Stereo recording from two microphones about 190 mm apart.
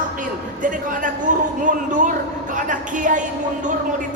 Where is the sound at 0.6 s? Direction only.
45° right (ahead or behind).